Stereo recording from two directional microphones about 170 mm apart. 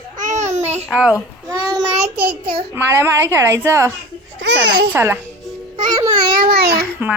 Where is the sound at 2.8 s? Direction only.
15° right (ahead or behind).